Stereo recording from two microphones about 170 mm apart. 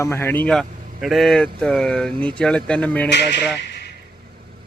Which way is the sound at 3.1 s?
90° left.